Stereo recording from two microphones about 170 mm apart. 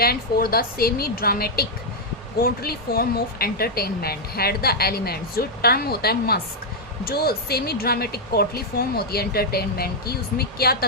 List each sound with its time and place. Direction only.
0.0 s speech: 65° left (ahead or behind)